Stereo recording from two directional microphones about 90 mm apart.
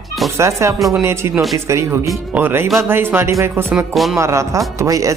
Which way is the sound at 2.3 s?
25° right (ahead or behind).